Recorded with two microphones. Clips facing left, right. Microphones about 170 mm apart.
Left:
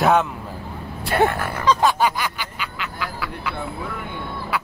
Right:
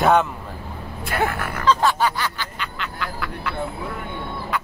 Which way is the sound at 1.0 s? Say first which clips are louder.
Left 4 dB; 30° left (ahead or behind).